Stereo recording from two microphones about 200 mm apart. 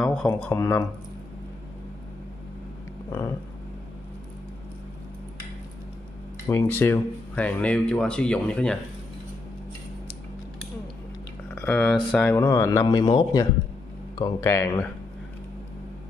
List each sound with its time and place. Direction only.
0.0 s a sound: 5° left (ahead or behind)
0.4 s speech: 10° left (ahead or behind)
3.1 s speech: 15° left (ahead or behind)
6.4 s speech: 10° left (ahead or behind)
11.5 s speech: 10° left (ahead or behind)
12.8 s a man's voice: 25° left (ahead or behind)